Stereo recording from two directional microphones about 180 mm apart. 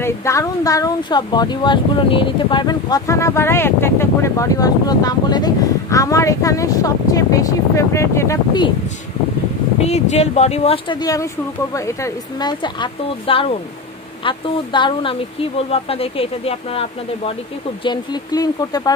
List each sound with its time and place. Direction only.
0.0 s speech: 15° left (ahead or behind)
9.8 s speech: 40° left (ahead or behind)
17.8 s speech: 20° left (ahead or behind)